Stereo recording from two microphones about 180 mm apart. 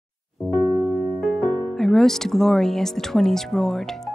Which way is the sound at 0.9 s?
15° left (ahead or behind).